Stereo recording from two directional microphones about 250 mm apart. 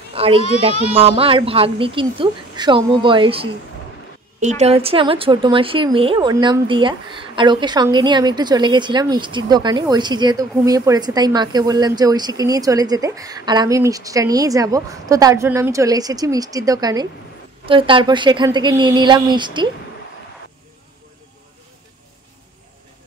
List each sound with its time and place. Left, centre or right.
0.1 s a child's voice: right